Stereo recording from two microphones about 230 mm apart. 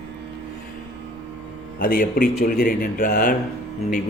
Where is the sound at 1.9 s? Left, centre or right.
Left.